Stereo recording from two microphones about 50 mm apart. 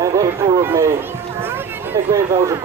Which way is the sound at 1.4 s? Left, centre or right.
Right.